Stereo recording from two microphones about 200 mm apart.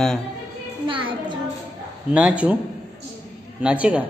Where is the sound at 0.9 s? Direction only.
25° right (ahead or behind).